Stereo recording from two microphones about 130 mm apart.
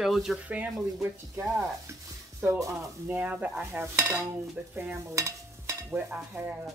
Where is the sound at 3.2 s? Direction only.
10° right (ahead or behind).